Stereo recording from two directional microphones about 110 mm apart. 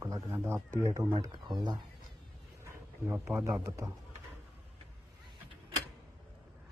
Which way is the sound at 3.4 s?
25° right (ahead or behind).